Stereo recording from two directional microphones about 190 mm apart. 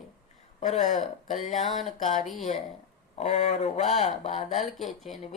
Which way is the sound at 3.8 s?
Centre (ahead or behind).